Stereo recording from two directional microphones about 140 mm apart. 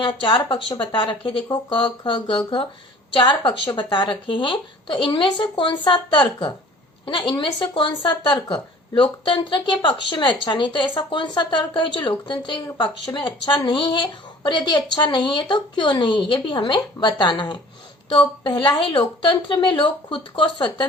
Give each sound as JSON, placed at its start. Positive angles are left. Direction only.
{"t": 0.0, "sound": "speech", "side_deg": 35}